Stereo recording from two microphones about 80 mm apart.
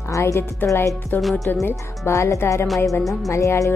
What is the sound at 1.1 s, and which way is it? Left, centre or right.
Speech, left.